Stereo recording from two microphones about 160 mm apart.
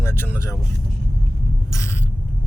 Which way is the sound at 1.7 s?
15° left (ahead or behind).